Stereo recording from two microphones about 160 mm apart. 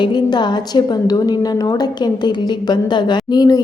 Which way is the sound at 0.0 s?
30° left (ahead or behind).